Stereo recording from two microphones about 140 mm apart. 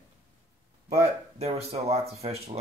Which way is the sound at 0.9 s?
50° right (ahead or behind).